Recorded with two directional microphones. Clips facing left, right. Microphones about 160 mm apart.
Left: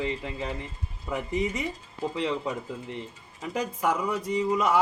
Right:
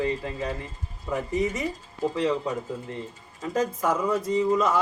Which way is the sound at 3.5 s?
15° left (ahead or behind).